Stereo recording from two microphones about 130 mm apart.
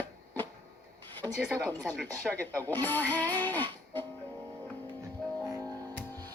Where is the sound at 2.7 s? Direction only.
15° left (ahead or behind).